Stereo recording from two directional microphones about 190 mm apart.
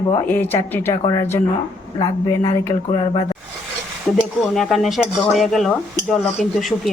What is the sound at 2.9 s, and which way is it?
Speech, 25° left (ahead or behind).